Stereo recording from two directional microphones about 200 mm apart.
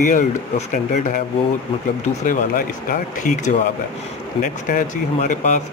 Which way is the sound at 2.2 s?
40° left (ahead or behind).